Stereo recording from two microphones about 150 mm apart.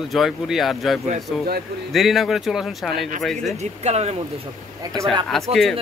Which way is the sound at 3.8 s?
45° right (ahead or behind).